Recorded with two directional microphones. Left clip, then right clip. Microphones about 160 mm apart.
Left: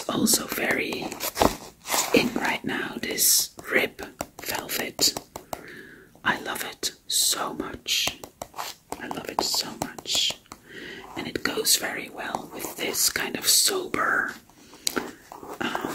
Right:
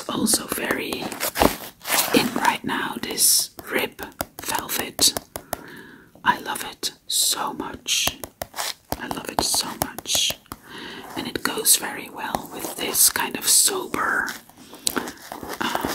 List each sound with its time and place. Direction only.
0.0 s speech: centre (ahead or behind)
0.8 s speech: 10° right (ahead or behind)
1.3 s a sound: 15° right (ahead or behind)
2.1 s speech: 10° right (ahead or behind)
4.0 s whispering: 15° right (ahead or behind)
6.2 s speech: centre (ahead or behind)
9.0 s whispering: 15° right (ahead or behind)
12.6 s speech: 10° right (ahead or behind)
14.9 s biting: 10° right (ahead or behind)